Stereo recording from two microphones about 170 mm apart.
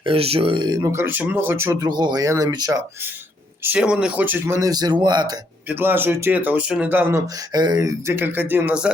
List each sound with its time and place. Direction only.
0.0 s speech: 35° right (ahead or behind)
3.6 s speech: 10° right (ahead or behind); by 5.4 s 25° right (ahead or behind)
5.6 s speech: 10° right (ahead or behind)
7.5 s speech: 25° right (ahead or behind); by 8.9 s 10° right (ahead or behind)